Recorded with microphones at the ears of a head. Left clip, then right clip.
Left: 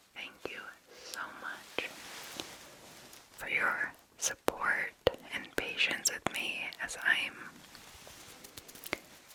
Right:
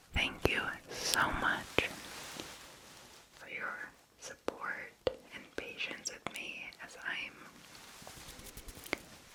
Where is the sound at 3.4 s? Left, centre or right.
Left.